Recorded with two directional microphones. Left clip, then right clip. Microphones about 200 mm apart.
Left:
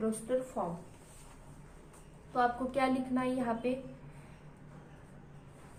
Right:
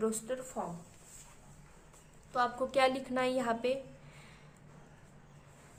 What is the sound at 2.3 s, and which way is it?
A woman's voice, 35° right (ahead or behind).